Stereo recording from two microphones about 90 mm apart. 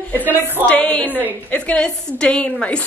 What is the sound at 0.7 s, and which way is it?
A woman's voice, 15° left (ahead or behind).